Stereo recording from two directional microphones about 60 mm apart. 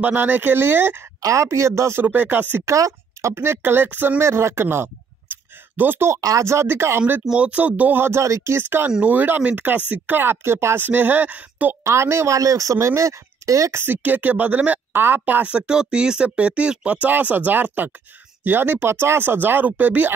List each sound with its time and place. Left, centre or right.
0.0 s speech: right
1.2 s speech: right
2.0 s speech: right
2.6 s speech: right
4.2 s speech: right
6.4 s speech: right
7.3 s a woman's voice: right
8.0 s speech: right
8.6 s a woman's voice: right
10.9 s a woman's voice: right
11.8 s speech: right
13.7 s a woman's voice: right
15.4 s speech: centre
18.9 s speech: right